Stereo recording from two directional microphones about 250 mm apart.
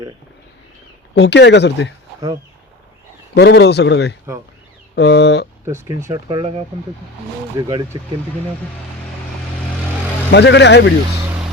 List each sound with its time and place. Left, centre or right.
1.1 s speech: left
3.3 s speech: left
5.6 s speech: centre
7.6 s speech: centre
10.3 s speech: left